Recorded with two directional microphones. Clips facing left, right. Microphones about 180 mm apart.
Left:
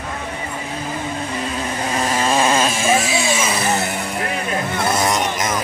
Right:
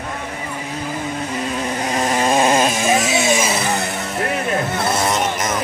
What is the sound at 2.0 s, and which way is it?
Chainsaw, 20° right (ahead or behind).